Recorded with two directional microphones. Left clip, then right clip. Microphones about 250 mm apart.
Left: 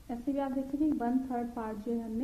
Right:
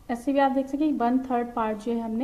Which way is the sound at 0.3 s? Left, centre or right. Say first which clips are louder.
Right 11 dB; right.